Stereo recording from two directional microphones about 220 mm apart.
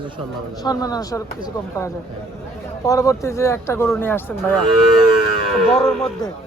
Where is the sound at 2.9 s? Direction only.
15° left (ahead or behind).